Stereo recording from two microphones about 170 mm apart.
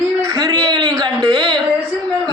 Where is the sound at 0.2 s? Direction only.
20° right (ahead or behind).